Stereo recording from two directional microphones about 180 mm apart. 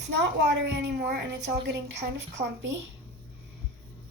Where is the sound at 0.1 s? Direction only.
70° right (ahead or behind).